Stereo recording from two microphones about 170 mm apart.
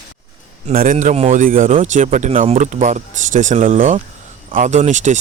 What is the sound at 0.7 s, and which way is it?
Speech, 55° right (ahead or behind).